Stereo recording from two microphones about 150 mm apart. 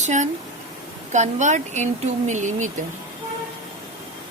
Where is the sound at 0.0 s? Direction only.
55° right (ahead or behind).